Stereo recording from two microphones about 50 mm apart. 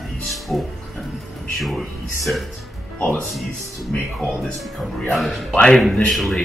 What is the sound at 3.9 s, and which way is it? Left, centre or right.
Speech, left.